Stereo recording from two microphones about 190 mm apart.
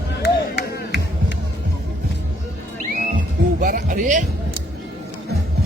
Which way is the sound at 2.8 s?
40° right (ahead or behind).